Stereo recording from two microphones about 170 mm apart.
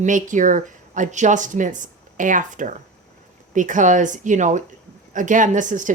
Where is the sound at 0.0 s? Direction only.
50° right (ahead or behind).